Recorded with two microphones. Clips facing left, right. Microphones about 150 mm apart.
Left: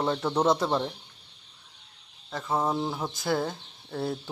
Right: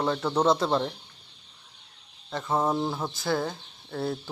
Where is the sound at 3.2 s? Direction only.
20° left (ahead or behind).